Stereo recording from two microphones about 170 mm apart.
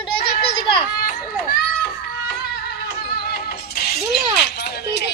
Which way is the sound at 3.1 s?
65° left (ahead or behind).